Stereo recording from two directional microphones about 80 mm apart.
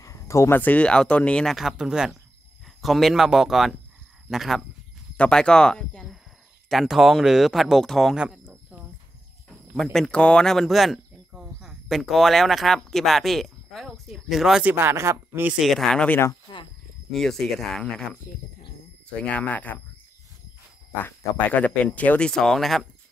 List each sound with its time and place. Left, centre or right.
0.0 s a sound: left
0.6 s speech: centre
1.5 s speech: centre
5.1 s speech: centre
6.7 s speech: centre
9.9 s speech: centre
14.6 s speech: right
15.6 s speech: centre
16.5 s speech: left
17.1 s speech: centre
19.2 s speech: centre
21.5 s speech: centre
22.3 s speech: centre